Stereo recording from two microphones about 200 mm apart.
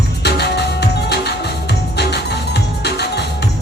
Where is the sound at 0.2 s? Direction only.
55° left (ahead or behind).